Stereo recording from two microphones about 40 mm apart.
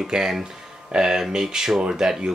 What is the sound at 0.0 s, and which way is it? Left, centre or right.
Speech, centre.